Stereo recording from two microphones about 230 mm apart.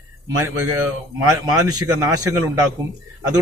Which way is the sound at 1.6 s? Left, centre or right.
Centre.